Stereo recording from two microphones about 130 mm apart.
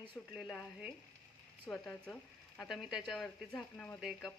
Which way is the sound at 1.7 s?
10° left (ahead or behind).